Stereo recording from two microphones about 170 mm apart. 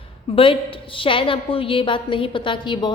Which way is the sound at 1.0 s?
30° left (ahead or behind).